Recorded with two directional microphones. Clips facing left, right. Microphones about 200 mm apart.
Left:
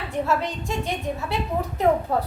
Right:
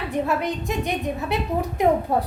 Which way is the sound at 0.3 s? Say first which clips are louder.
Right 1 dB; 15° right (ahead or behind).